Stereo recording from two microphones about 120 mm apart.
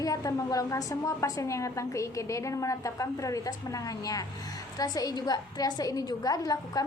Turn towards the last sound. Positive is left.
turn(degrees=30)  # may be behind; listen again after turning